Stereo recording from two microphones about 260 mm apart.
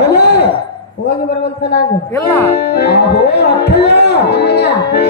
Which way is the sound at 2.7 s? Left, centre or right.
Left.